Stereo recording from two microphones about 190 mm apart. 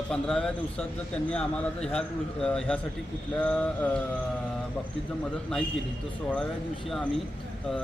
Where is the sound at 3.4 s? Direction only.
5° left (ahead or behind).